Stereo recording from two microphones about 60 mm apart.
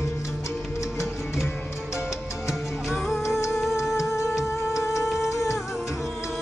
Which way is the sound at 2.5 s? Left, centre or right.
Centre.